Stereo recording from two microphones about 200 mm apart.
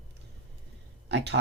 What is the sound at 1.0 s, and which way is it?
Speech, 60° right (ahead or behind).